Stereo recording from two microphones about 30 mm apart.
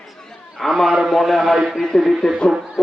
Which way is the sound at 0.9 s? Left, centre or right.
Centre.